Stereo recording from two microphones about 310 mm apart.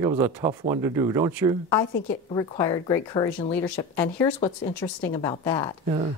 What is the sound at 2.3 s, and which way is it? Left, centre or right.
A woman's voice, centre.